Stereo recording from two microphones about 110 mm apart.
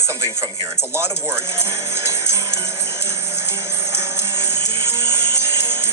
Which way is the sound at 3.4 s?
25° right (ahead or behind).